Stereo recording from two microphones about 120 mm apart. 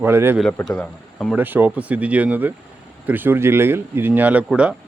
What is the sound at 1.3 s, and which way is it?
Speech, 15° right (ahead or behind).